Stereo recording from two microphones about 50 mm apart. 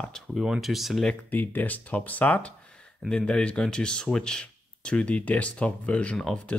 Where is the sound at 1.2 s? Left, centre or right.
Left.